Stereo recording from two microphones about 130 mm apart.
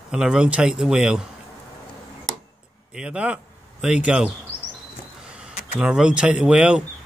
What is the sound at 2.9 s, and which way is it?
Speech, 5° right (ahead or behind).